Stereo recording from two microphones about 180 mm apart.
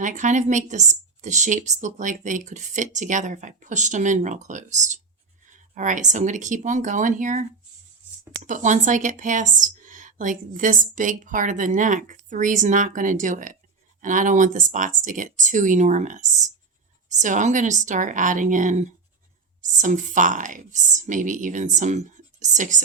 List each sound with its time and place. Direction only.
0.0 s speech: 45° right (ahead or behind)